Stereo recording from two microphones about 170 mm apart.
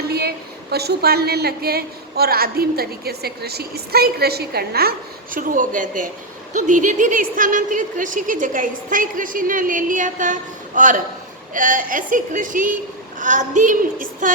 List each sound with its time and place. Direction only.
0.1 s a woman's voice: 70° right (ahead or behind); by 14.4 s 50° right (ahead or behind)